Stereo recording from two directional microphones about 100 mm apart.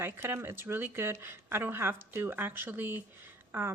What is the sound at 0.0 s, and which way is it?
Speech, 25° right (ahead or behind).